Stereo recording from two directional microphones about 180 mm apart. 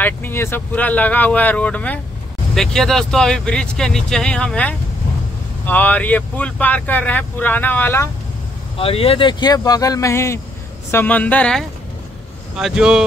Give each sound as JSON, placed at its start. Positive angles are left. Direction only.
{"t": 0.0, "sound": "speech", "side_deg": 10}
{"t": 8.7, "sound": "speech", "side_deg": 30}